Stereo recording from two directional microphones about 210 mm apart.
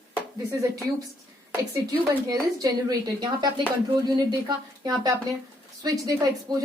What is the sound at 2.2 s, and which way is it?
Speech, 15° right (ahead or behind).